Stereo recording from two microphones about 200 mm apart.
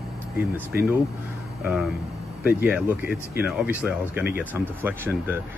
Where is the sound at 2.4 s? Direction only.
10° right (ahead or behind).